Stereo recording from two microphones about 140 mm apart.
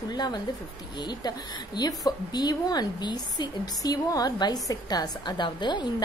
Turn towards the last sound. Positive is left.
turn(degrees=30)  # may be behind; listen again after turning